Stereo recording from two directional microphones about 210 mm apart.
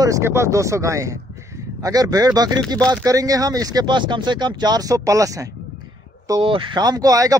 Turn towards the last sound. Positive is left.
turn(degrees=-15)  # may be behind; listen again after turning